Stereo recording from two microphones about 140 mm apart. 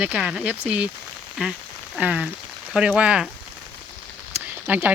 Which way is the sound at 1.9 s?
10° right (ahead or behind).